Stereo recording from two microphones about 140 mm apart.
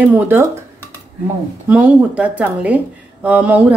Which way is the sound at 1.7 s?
10° right (ahead or behind).